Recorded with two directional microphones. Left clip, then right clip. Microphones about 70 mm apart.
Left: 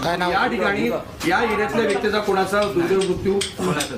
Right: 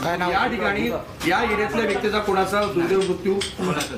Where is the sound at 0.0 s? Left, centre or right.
Centre.